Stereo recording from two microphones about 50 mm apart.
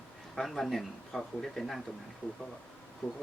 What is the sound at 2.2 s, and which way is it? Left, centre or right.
Speech, left.